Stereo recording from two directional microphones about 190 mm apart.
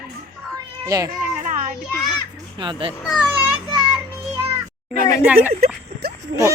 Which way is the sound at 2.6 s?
25° right (ahead or behind).